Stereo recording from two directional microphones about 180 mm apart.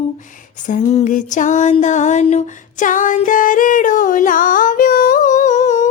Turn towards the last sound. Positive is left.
turn(degrees=40)  # may be behind; listen again after turning